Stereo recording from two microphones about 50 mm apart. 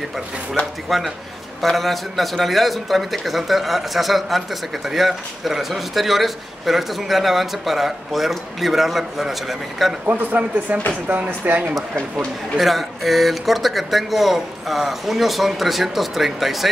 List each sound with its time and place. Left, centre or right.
0.8 s speech: centre
10.0 s speech: right
12.5 s speech: centre